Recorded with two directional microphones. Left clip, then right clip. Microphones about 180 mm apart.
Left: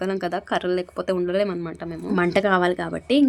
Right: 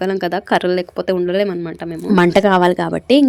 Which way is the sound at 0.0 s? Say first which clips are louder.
Right 7 dB; 20° right (ahead or behind).